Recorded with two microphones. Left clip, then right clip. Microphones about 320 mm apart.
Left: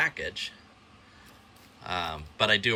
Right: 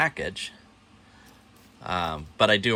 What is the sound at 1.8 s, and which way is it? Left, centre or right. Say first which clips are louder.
Speech: right 4 dB; centre.